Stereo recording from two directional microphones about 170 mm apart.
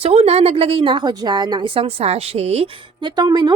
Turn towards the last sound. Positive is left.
turn(degrees=-25)  # may be behind; listen again after turning